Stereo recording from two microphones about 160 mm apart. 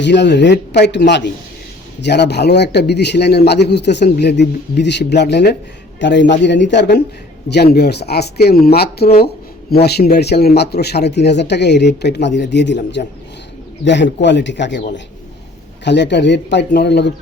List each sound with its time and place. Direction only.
0.0 s a man's voice: 90° left
15.8 s a man's voice: 90° left